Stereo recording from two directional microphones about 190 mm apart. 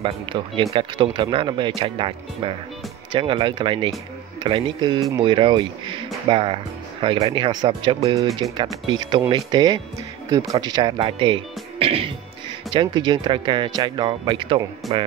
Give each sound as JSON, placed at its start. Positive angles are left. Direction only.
{"t": 0.0, "sound": "speech", "side_deg": -25}